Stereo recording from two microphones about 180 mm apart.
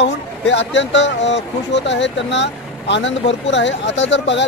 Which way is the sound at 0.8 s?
85° left.